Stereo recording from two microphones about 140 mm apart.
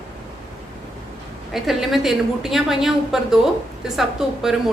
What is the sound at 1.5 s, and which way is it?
A woman's voice, centre (ahead or behind).